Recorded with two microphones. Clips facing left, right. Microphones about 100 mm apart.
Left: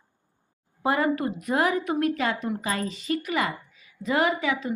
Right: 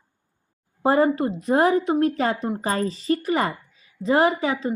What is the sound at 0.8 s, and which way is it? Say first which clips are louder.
A woman's voice: right 5 dB; 30° right (ahead or behind).